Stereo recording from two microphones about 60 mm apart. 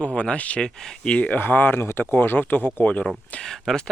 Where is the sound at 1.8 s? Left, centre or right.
Left.